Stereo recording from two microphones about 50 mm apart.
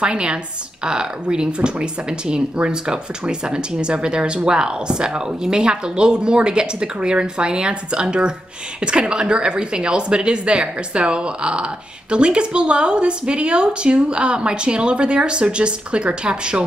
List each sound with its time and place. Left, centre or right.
0.0 s speech: centre